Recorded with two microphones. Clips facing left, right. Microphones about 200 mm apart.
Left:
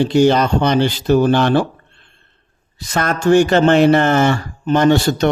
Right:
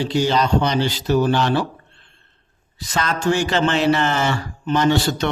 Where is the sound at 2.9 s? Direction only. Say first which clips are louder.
Left 7 dB; 50° left (ahead or behind).